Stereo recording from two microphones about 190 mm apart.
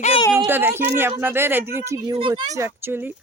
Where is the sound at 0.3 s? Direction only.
10° right (ahead or behind).